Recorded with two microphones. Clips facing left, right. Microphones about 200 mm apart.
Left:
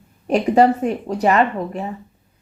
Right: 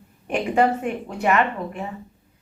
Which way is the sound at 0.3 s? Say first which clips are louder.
Left 6 dB; 40° left (ahead or behind).